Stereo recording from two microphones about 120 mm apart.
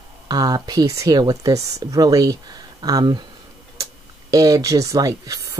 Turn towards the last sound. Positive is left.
turn(degrees=-30)  # may be behind; listen again after turning